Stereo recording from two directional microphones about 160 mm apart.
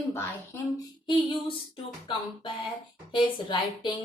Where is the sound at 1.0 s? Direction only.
30° left (ahead or behind).